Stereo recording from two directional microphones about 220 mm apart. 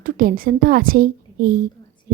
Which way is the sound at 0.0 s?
40° right (ahead or behind).